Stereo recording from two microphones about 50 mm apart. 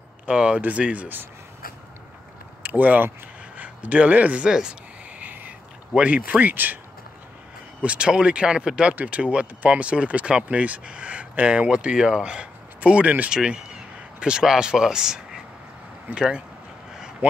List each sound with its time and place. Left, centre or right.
0.3 s speech: right
2.6 s speech: right; by 4.7 s centre
5.2 s a sound: right
6.0 s speech: right
7.8 s speech: right